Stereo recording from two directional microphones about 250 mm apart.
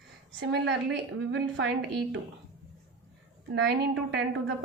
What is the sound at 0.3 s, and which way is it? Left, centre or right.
A woman's voice, right.